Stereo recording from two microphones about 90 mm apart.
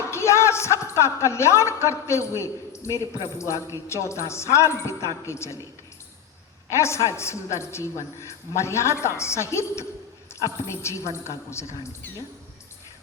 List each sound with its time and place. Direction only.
0.1 s speech: 30° left (ahead or behind)
6.7 s speech: 30° left (ahead or behind)